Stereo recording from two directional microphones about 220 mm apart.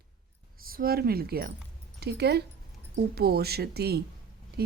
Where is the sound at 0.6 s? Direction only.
40° right (ahead or behind).